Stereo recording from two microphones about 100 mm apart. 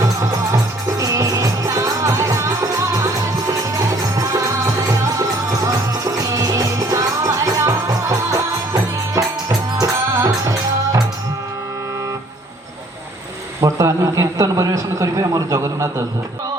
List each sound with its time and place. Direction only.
0.0 s music: 35° right (ahead or behind)
13.6 s speech: 35° right (ahead or behind)